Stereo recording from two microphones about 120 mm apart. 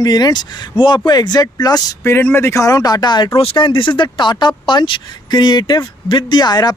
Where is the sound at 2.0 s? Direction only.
20° left (ahead or behind).